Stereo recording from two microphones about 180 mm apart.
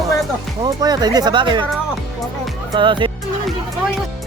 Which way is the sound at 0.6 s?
20° right (ahead or behind).